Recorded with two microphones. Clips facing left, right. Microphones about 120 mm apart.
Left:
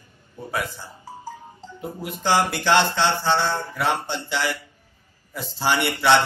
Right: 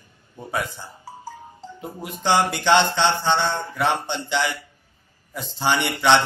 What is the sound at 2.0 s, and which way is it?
Mantra, 5° left (ahead or behind).